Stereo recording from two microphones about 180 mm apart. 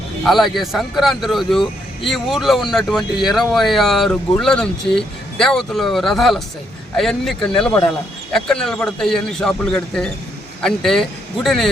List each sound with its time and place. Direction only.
0.3 s speech: centre (ahead or behind)